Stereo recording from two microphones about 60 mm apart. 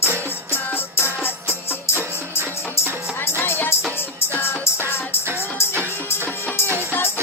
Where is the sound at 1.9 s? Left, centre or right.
Right.